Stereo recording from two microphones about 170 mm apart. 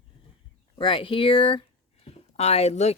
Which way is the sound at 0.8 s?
30° left (ahead or behind).